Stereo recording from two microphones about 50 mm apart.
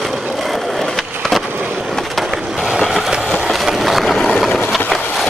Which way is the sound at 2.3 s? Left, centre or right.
Centre.